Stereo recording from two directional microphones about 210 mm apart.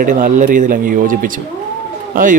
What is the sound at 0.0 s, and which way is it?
Speech, 40° right (ahead or behind).